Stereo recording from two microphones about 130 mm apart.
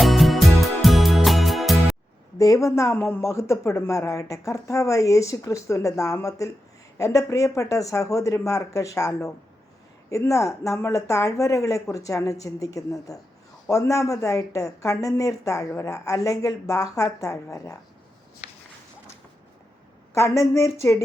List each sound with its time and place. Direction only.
0.0 s music: centre (ahead or behind)
2.4 s speech: 25° left (ahead or behind)
20.1 s speech: 25° left (ahead or behind)